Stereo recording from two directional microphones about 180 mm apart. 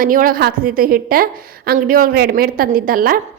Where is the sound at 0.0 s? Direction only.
50° right (ahead or behind).